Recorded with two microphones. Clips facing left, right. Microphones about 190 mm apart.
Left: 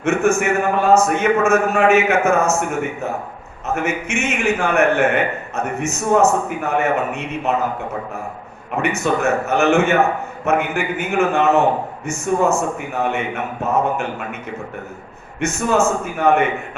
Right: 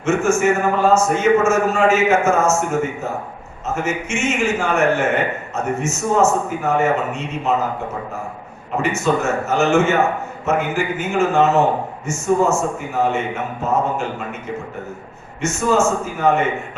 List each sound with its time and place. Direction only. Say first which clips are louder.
0.0 s a man's voice: even; 60° left (ahead or behind)
9.0 s a man's voice: left 1 dB; 60° left (ahead or behind)
15.4 s a man's voice: even; 60° left (ahead or behind)